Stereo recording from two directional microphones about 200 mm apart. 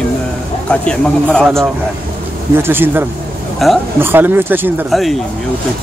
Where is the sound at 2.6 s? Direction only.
10° right (ahead or behind).